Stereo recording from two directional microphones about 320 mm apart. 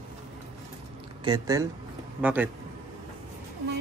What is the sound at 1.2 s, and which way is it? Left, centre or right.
A man's voice, centre.